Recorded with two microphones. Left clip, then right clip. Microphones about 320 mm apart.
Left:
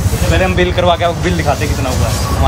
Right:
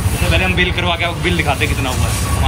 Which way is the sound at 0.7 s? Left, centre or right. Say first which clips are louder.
Left 6 dB; centre.